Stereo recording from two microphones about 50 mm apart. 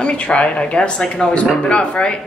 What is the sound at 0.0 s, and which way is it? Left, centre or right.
Speech, left.